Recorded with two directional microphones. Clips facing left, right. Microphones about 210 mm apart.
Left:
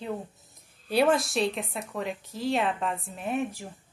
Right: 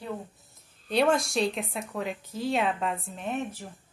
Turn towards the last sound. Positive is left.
turn(degrees=10)  # may be behind; listen again after turning